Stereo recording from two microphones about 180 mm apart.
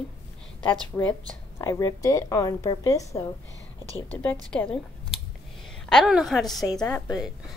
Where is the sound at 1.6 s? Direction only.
20° left (ahead or behind).